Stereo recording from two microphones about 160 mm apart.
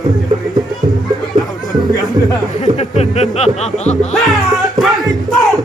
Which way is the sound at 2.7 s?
45° left (ahead or behind).